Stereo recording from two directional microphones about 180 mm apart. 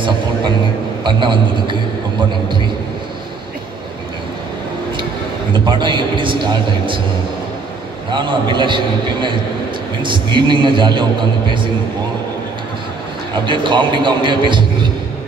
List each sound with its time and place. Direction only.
1.0 s a man's voice: 25° right (ahead or behind)
5.5 s a man's voice: 25° right (ahead or behind)
8.1 s a man's voice: 25° right (ahead or behind)
13.5 s a man's voice: 25° right (ahead or behind)